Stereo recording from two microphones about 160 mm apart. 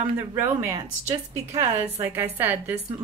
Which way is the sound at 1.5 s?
40° right (ahead or behind).